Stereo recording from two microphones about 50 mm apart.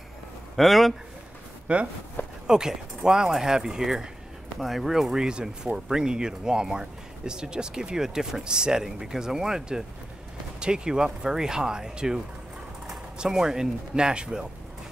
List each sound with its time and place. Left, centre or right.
0.6 s speech: centre
1.7 s speech: right
2.4 s speech: centre